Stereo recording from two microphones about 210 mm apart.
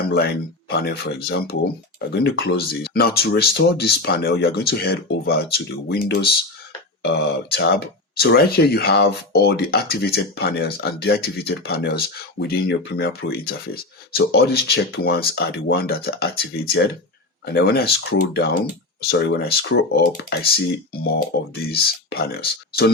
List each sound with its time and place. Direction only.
0.7 s speech: 50° left (ahead or behind)